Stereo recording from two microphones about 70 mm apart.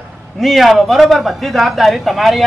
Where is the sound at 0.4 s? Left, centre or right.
Centre.